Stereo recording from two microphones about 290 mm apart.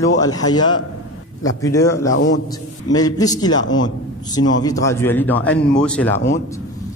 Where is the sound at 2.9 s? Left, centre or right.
Centre.